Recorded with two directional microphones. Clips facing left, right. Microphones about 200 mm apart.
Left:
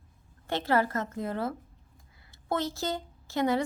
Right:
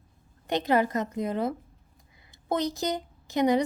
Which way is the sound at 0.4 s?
15° right (ahead or behind).